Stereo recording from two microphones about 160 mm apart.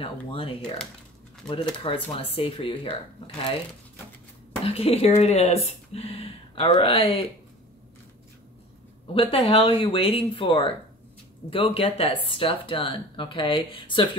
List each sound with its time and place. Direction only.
0.0 s speech: 35° left (ahead or behind)
1.5 s speech: 35° left (ahead or behind)
4.6 s speech: 40° left (ahead or behind)
9.0 s speech: 35° left (ahead or behind)